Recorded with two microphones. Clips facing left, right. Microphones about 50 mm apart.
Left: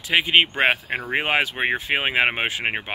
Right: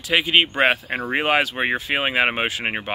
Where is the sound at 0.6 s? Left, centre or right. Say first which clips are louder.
Right 1 dB; centre.